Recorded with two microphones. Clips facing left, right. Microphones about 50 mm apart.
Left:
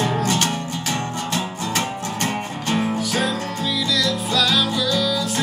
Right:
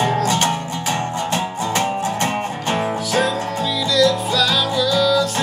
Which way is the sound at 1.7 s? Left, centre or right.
Right.